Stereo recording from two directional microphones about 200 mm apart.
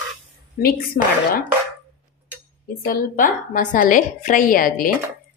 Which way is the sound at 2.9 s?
45° left (ahead or behind).